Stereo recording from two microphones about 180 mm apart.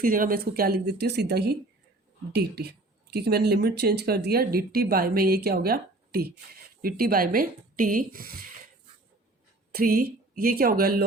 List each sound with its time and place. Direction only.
0.0 s speech: 50° right (ahead or behind)
9.7 s speech: 55° right (ahead or behind)